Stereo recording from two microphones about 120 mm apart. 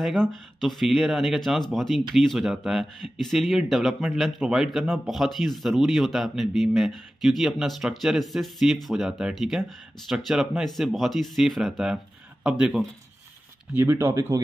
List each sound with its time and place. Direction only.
0.0 s speech: 5° left (ahead or behind)
13.7 s speech: 20° right (ahead or behind)